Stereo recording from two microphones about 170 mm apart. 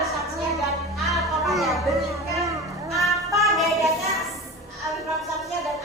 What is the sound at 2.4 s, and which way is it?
Children playing, 20° right (ahead or behind).